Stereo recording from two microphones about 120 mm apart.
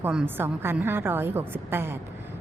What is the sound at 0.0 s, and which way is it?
Speech, 5° right (ahead or behind).